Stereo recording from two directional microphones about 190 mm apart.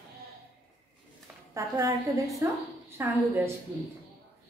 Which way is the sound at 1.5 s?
15° right (ahead or behind).